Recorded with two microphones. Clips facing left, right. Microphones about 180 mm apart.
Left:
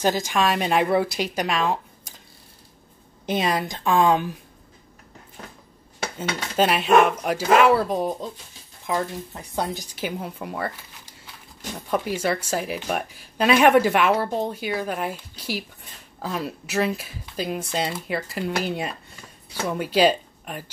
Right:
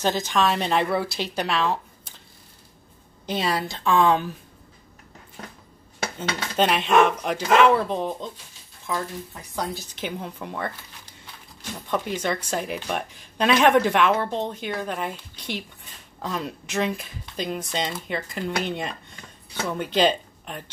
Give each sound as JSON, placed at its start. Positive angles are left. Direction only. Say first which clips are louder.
{"t": 0.0, "sound": "speech", "louder": "left 1 dB", "side_deg": 10}
{"t": 3.3, "sound": "speech", "louder": "left 2 dB", "side_deg": 15}
{"t": 6.1, "sound": "speech", "louder": "left 1 dB", "side_deg": 5}
{"t": 8.8, "sound": "speech", "louder": "left 3 dB", "side_deg": 25}
{"t": 9.8, "sound": "speech", "louder": "left 2 dB", "side_deg": 10}
{"t": 11.9, "sound": "speech", "louder": "left 2 dB", "side_deg": 10}